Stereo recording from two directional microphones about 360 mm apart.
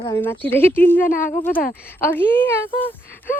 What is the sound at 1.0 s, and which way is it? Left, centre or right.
Speech, left.